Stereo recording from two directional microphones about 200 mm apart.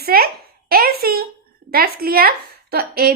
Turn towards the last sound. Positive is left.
turn(degrees=-50)  # may be behind; listen again after turning